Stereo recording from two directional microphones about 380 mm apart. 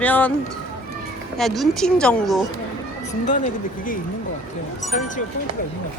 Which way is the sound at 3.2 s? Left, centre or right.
Centre.